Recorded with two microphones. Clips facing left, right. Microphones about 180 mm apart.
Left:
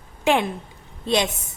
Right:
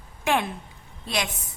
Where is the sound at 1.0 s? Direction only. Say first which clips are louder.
Left 8 dB; 25° left (ahead or behind).